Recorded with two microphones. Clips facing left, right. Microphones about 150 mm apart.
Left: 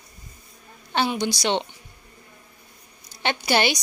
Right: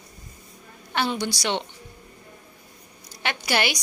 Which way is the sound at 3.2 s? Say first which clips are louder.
Left 3 dB; 25° left (ahead or behind).